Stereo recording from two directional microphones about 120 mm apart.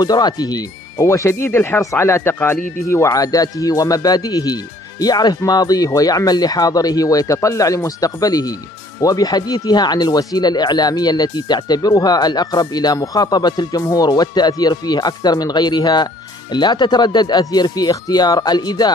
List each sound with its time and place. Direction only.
0.0 s speech: 35° left (ahead or behind)